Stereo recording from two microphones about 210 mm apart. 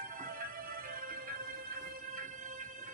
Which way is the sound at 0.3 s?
40° right (ahead or behind).